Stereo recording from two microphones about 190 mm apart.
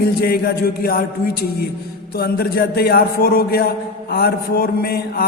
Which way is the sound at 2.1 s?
55° left (ahead or behind).